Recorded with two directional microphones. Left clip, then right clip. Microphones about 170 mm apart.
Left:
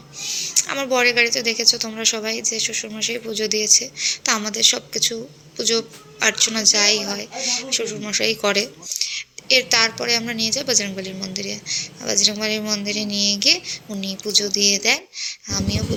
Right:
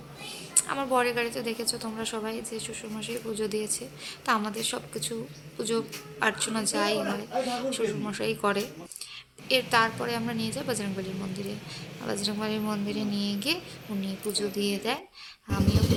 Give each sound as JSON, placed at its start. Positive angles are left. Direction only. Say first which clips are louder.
{"t": 0.3, "sound": "a woman's voice", "louder": "left 9 dB", "side_deg": 0}